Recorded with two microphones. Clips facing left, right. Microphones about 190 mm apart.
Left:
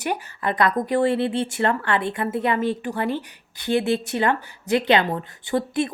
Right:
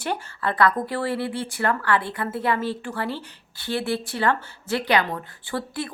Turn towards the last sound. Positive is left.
turn(degrees=20)  # may be behind; listen again after turning